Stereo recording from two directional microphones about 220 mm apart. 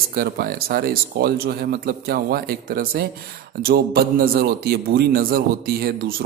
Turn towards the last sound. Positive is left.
turn(degrees=-45)  # may be behind; listen again after turning